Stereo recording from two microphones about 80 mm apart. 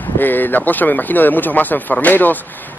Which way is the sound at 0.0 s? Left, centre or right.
Left.